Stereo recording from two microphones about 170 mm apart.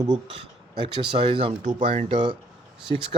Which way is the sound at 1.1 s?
30° right (ahead or behind).